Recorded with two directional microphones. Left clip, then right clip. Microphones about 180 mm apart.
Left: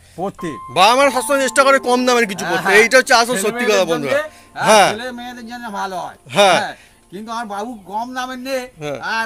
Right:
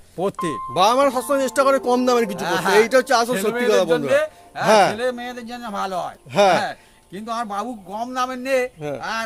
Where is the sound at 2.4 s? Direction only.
40° right (ahead or behind).